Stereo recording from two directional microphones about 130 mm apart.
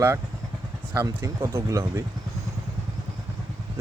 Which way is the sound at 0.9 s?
25° right (ahead or behind).